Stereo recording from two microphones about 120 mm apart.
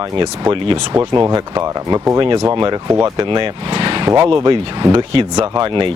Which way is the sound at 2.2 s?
40° right (ahead or behind).